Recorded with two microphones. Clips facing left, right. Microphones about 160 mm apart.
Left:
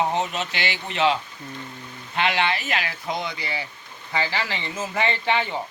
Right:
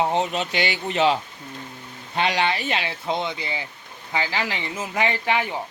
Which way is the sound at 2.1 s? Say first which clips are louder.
Right 1 dB; 35° right (ahead or behind).